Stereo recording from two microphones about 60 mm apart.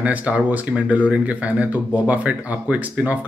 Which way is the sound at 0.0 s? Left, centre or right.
Right.